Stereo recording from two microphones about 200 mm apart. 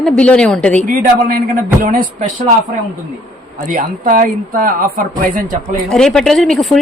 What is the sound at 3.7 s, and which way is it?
Speech, 45° right (ahead or behind).